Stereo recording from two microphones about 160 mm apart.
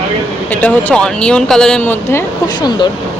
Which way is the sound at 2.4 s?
25° left (ahead or behind).